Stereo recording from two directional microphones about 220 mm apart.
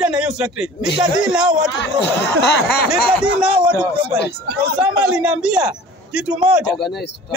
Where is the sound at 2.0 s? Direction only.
50° left (ahead or behind).